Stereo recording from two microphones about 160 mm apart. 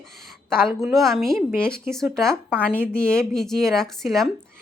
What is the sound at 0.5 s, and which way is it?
A woman's voice, centre (ahead or behind).